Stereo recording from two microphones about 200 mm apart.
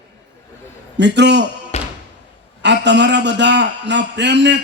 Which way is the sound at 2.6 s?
60° right (ahead or behind).